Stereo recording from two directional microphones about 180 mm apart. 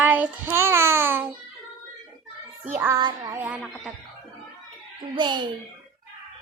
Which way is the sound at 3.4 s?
10° right (ahead or behind).